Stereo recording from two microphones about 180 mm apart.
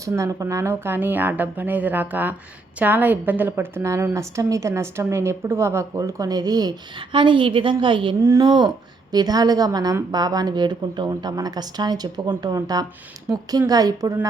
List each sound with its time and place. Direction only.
0.0 s a woman's voice: 15° right (ahead or behind)